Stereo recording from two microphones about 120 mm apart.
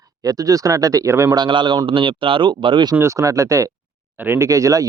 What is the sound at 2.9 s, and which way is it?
Speech, 25° right (ahead or behind).